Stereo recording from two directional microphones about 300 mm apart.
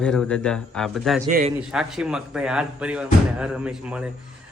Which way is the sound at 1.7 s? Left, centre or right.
Centre.